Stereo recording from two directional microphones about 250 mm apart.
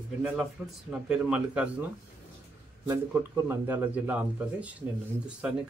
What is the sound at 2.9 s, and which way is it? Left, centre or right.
Speech, centre.